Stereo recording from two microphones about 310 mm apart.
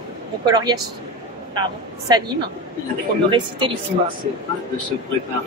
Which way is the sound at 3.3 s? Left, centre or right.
Centre.